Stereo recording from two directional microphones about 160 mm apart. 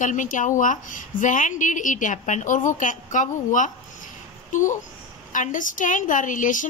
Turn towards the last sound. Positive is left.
turn(degrees=55)  # may be behind; listen again after turning